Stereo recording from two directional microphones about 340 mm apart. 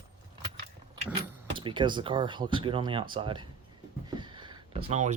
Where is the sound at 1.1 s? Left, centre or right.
Centre.